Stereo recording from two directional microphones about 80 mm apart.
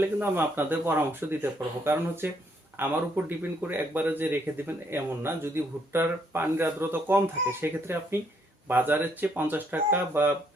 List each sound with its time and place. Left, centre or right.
0.0 s speech: right